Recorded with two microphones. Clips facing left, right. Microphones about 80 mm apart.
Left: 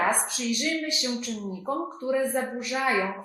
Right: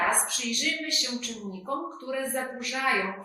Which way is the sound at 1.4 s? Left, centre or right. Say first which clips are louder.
Left 2 dB; centre.